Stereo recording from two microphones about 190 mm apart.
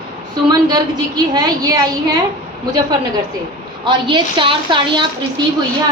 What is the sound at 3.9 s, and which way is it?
A woman's voice, 25° right (ahead or behind).